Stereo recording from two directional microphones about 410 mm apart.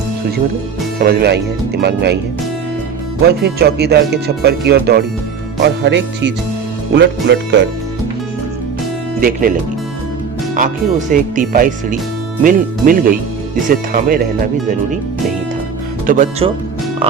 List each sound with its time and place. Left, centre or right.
0.9 s speech: right
3.2 s speech: right
9.2 s speech: right
16.0 s speech: centre